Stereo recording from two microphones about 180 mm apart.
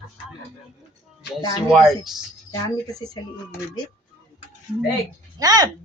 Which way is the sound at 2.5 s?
20° left (ahead or behind).